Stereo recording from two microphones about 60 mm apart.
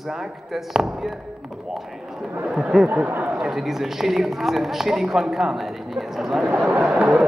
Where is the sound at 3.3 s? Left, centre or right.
Centre.